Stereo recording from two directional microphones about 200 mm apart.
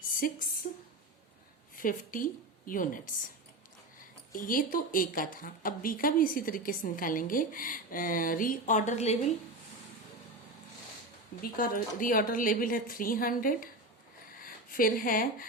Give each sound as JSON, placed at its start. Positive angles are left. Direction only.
{"t": 0.2, "sound": "a woman's voice", "side_deg": 45}
{"t": 1.7, "sound": "a woman's voice", "side_deg": 45}
{"t": 4.3, "sound": "a woman's voice", "side_deg": 45}
{"t": 11.5, "sound": "a woman's voice", "side_deg": 45}